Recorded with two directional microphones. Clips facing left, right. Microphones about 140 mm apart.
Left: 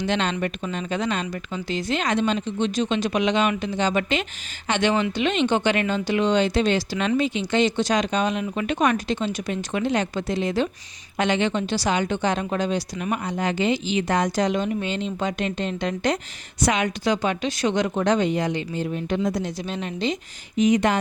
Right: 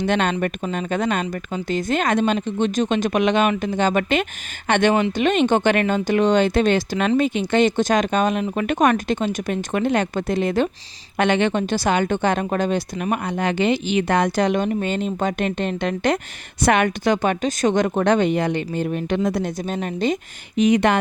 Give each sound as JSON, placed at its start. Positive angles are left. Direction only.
{"t": 0.0, "sound": "a woman's voice", "side_deg": -55}
{"t": 20.6, "sound": "speech", "side_deg": -65}